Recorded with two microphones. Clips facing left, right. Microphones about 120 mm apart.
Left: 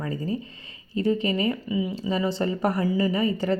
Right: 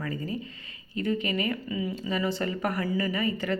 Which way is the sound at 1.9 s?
30° left (ahead or behind).